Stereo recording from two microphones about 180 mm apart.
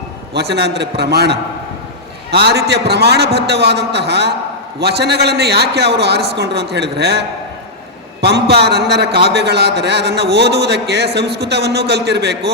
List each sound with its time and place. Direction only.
0.3 s a man's voice: 65° right (ahead or behind)